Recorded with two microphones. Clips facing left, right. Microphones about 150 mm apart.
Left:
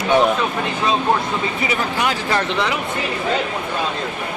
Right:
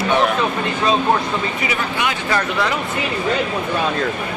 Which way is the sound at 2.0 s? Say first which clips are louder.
Even; 40° left (ahead or behind).